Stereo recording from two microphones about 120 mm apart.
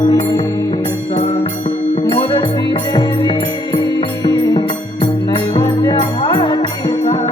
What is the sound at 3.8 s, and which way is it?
Music, 35° left (ahead or behind).